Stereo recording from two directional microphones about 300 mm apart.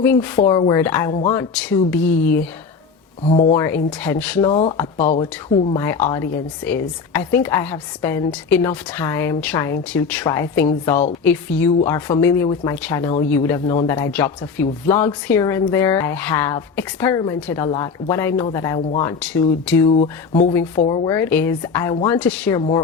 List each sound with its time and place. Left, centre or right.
0.0 s a woman's voice: centre
3.5 s speech: centre
4.9 s speech: left
5.7 s a woman's voice: centre
19.9 s speech: centre
20.5 s speech: centre
20.8 s speech: centre
21.1 s speech: centre